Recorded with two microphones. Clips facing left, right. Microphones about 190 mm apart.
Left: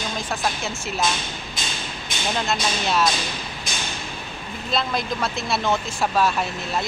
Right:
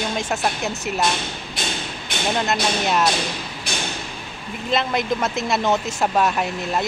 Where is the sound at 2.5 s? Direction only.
15° right (ahead or behind).